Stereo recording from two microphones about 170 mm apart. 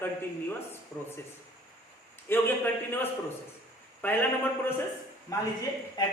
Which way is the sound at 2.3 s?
10° left (ahead or behind).